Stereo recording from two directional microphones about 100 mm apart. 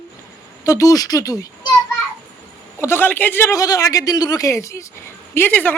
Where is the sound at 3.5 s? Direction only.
35° left (ahead or behind).